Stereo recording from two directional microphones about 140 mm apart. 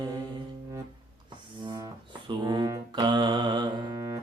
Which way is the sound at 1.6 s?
30° right (ahead or behind).